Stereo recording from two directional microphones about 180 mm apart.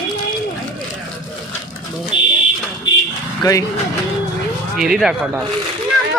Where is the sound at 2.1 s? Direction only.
25° left (ahead or behind).